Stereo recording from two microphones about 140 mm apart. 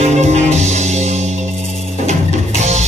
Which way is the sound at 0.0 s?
55° right (ahead or behind).